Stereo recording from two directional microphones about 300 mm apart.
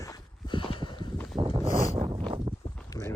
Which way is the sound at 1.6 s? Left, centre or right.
Centre.